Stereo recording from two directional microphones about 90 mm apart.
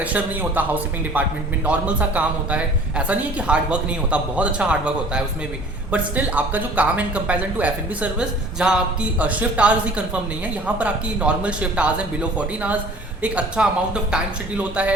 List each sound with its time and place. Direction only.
0.0 s speech: 20° right (ahead or behind)
13.2 s speech: 15° right (ahead or behind)